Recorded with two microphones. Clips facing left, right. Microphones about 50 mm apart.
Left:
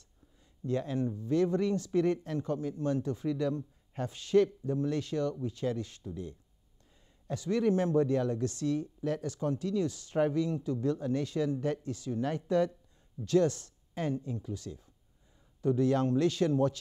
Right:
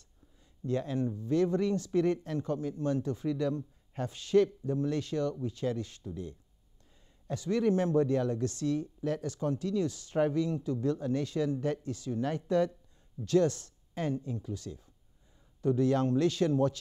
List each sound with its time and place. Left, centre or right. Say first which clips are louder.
0.7 s speech: even; centre